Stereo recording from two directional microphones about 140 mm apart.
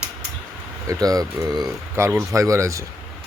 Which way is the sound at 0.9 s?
25° right (ahead or behind).